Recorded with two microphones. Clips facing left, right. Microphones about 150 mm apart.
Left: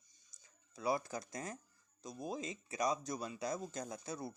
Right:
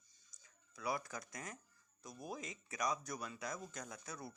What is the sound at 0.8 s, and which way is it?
Speech, 30° left (ahead or behind).